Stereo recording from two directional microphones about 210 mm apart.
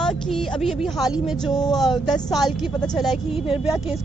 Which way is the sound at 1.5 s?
20° left (ahead or behind).